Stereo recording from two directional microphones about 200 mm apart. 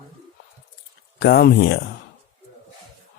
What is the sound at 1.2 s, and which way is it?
Speech, 50° left (ahead or behind).